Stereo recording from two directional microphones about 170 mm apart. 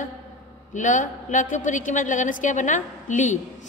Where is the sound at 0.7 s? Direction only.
50° left (ahead or behind).